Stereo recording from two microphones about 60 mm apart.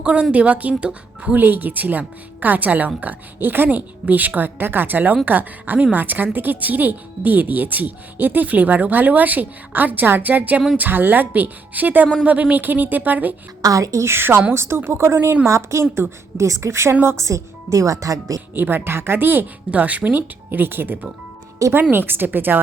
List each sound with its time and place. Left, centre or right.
0.0 s speech: centre
1.4 s a woman's voice: right
13.6 s a woman's voice: right
14.0 s a woman's voice: right
18.5 s a woman's voice: right
19.7 s speech: right
20.5 s a woman's voice: right